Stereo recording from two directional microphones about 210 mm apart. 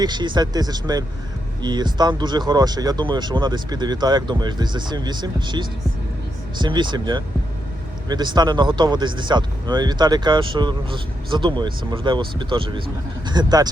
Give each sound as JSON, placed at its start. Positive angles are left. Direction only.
{"t": 0.0, "sound": "speech", "side_deg": -20}